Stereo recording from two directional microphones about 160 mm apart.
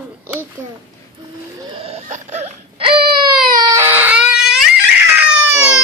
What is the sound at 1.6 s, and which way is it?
Whimper, 35° right (ahead or behind).